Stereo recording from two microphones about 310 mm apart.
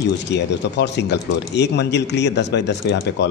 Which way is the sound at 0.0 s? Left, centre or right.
Left.